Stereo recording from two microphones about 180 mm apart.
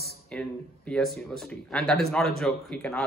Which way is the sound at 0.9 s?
5° left (ahead or behind).